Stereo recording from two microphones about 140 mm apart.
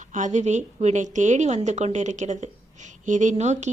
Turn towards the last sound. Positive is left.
turn(degrees=-55)  # may be behind; listen again after turning